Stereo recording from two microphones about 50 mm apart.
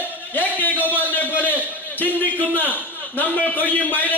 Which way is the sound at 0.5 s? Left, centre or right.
Left.